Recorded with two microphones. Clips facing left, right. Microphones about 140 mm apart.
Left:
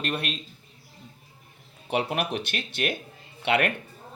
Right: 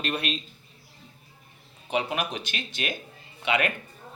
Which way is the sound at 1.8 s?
60° left (ahead or behind).